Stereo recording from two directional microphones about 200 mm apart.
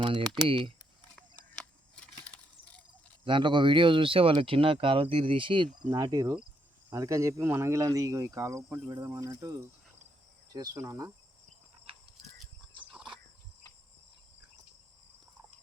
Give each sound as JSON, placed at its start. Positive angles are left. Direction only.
{"t": 0.0, "sound": "speech", "side_deg": -25}
{"t": 1.1, "sound": "a sound", "side_deg": 5}
{"t": 3.2, "sound": "speech", "side_deg": -25}